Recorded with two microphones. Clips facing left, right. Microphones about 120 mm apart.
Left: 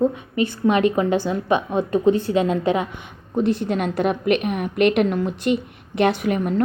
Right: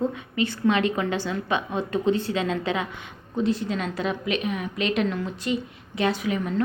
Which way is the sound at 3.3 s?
60° left (ahead or behind).